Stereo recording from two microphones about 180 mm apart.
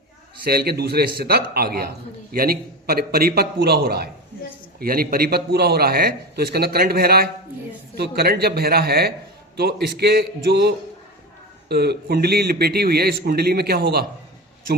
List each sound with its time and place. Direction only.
0.4 s a man's voice: 60° right (ahead or behind)